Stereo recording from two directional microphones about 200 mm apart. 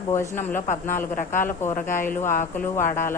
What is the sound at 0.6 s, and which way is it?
Speech, 40° left (ahead or behind).